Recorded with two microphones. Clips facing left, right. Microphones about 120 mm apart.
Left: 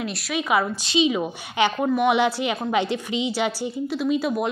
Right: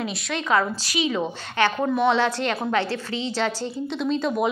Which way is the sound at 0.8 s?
20° left (ahead or behind).